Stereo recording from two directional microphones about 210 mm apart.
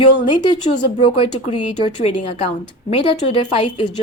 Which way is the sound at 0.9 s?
25° left (ahead or behind).